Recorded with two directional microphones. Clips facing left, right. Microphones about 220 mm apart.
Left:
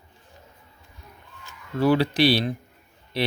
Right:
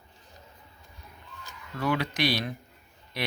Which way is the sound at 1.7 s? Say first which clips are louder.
Left 8 dB; 30° left (ahead or behind).